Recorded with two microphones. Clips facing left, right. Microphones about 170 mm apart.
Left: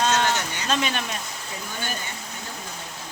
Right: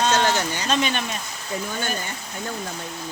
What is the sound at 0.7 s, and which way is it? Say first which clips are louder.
Speech: right 1 dB; centre (ahead or behind).